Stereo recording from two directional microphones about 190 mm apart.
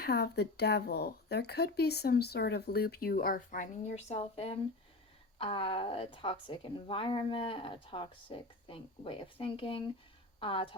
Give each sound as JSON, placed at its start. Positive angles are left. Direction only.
{"t": 0.0, "sound": "a woman's voice", "side_deg": 60}